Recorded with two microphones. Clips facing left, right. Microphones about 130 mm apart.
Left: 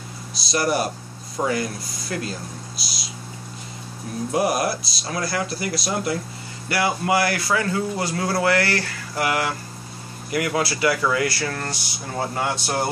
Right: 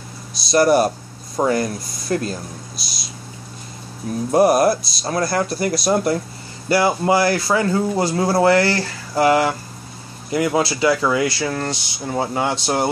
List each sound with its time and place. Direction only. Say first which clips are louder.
0.5 s speech: right 8 dB; 40° right (ahead or behind)
2.8 s a sound: even; 45° right (ahead or behind)
4.3 s speech: right 8 dB; 40° right (ahead or behind)
6.7 s speech: right 5 dB; 30° right (ahead or behind)